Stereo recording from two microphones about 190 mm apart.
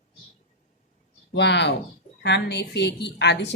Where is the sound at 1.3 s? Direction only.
65° left (ahead or behind).